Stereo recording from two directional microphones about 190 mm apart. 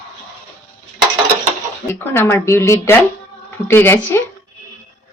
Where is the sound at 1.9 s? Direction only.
15° left (ahead or behind).